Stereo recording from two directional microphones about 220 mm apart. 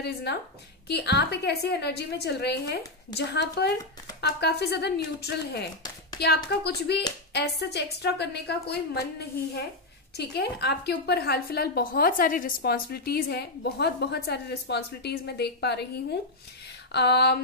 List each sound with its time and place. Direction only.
0.0 s a woman's voice: 50° left (ahead or behind)
10.1 s a woman's voice: 50° left (ahead or behind)